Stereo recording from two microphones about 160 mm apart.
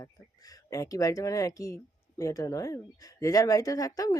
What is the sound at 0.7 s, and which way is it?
Speech, 20° left (ahead or behind).